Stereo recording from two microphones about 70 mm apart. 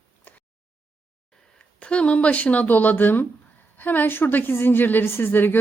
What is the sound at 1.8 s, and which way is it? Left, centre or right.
Speech, centre.